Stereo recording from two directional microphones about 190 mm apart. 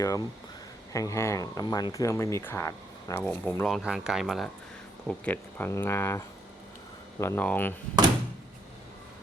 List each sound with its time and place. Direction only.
0.0 s speech: 15° left (ahead or behind)